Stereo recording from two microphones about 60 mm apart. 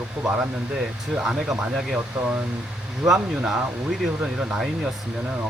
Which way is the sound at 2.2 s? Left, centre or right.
Centre.